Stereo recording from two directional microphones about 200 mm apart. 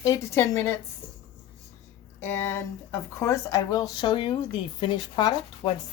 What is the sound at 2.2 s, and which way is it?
Speech, 10° left (ahead or behind).